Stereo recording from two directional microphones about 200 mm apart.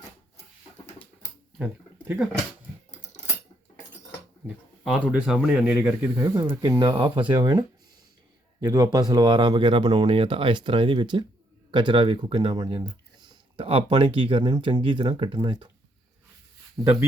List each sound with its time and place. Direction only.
1.5 s speech: 10° right (ahead or behind)
3.1 s a sound: 35° left (ahead or behind)
4.8 s speech: centre (ahead or behind); by 7.6 s 20° right (ahead or behind)
8.6 s speech: 20° right (ahead or behind)
16.8 s speech: centre (ahead or behind)